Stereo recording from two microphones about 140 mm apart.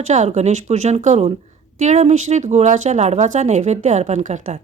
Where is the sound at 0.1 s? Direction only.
55° right (ahead or behind).